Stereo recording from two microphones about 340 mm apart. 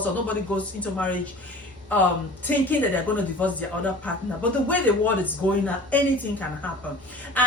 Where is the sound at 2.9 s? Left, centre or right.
Centre.